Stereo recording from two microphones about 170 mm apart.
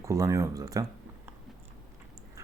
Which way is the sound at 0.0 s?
20° right (ahead or behind).